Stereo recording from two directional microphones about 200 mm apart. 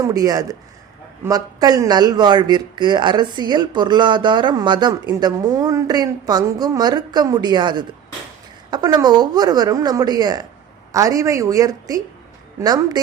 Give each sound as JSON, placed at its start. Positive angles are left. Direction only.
{"t": 0.0, "sound": "a woman's voice", "side_deg": -20}